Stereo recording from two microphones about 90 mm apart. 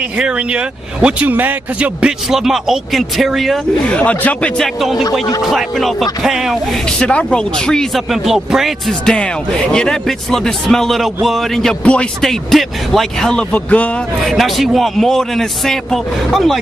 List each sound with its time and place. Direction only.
1.0 s speech: 20° right (ahead or behind); by 3.5 s centre (ahead or behind)
3.9 s a man's voice: 15° left (ahead or behind)
4.6 s speech: centre (ahead or behind)
7.0 s a man's voice: 10° left (ahead or behind)
9.0 s a man's voice: 10° left (ahead or behind)
14.2 s speech: centre (ahead or behind)